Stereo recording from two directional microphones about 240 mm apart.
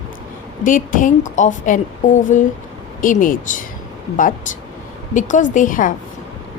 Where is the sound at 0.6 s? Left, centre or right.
Left.